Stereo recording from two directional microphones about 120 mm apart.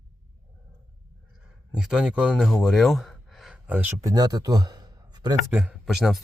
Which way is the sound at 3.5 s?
15° right (ahead or behind).